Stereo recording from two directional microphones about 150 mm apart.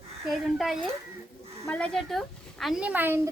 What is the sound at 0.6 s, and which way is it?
A child's voice, centre (ahead or behind).